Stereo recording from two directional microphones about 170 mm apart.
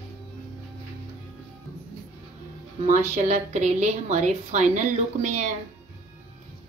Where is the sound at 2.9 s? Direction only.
45° right (ahead or behind).